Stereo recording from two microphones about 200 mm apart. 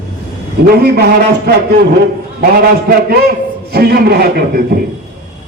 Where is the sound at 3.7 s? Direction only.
50° right (ahead or behind).